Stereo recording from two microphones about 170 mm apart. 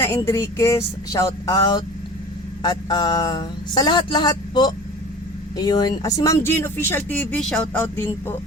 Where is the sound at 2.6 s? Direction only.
25° left (ahead or behind).